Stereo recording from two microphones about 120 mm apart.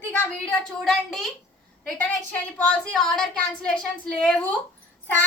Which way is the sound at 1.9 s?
15° left (ahead or behind).